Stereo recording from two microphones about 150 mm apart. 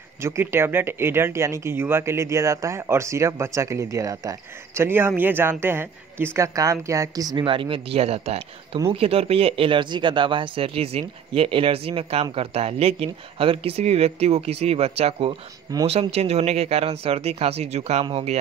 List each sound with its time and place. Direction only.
0.2 s speech: 15° right (ahead or behind); by 18.4 s 40° right (ahead or behind)